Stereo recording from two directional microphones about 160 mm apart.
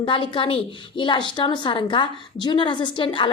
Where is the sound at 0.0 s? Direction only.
30° left (ahead or behind).